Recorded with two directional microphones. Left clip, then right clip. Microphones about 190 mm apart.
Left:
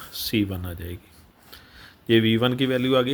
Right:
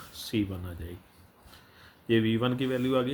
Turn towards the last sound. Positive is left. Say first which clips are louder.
# left 7 dB
turn(degrees=40)  # may be behind; listen again after turning